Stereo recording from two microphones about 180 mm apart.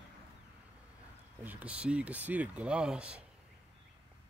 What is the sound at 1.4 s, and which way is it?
Speech, 10° right (ahead or behind).